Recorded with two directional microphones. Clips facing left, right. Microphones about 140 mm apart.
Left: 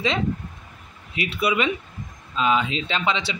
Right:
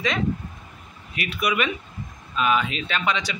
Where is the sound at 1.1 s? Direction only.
25° left (ahead or behind).